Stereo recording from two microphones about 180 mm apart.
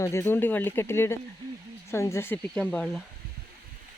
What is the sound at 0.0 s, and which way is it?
Speech, 15° left (ahead or behind).